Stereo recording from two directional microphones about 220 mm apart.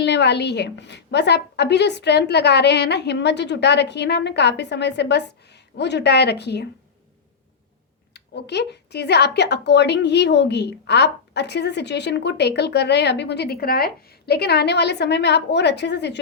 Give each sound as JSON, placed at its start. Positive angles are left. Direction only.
{"t": 0.0, "sound": "a woman's voice", "side_deg": 50}
{"t": 8.1, "sound": "a woman's voice", "side_deg": 50}